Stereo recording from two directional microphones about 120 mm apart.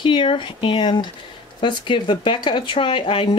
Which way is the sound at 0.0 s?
45° left (ahead or behind).